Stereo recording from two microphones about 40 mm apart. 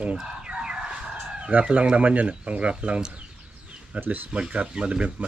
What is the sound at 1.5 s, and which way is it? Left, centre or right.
Speech, right.